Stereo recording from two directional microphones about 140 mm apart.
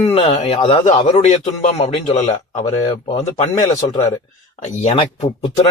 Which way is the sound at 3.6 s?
30° left (ahead or behind).